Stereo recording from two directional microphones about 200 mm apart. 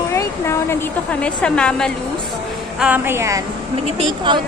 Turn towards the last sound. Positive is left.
turn(degrees=-25)  # may be behind; listen again after turning